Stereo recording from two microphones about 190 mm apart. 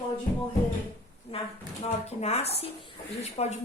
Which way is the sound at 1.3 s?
30° left (ahead or behind).